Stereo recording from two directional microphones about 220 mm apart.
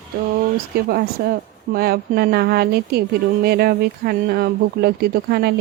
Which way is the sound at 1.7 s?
45° right (ahead or behind).